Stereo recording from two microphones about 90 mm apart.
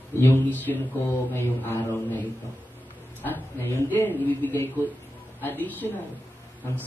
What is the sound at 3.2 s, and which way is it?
A woman's voice, 25° left (ahead or behind).